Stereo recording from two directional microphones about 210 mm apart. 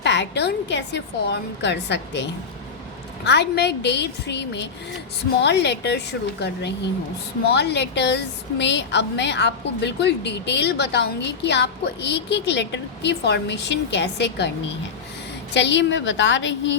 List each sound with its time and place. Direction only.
0.0 s a woman's voice: 55° left (ahead or behind)
15.5 s a woman's voice: 55° left (ahead or behind)